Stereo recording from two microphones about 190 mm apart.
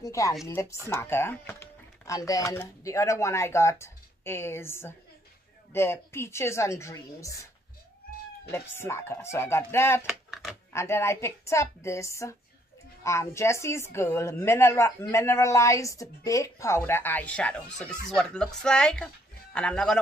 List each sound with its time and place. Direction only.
0.0 s a woman's voice: 15° left (ahead or behind)
8.5 s a woman's voice: 15° left (ahead or behind)
10.0 s a sound: centre (ahead or behind)
10.7 s a woman's voice: 15° left (ahead or behind)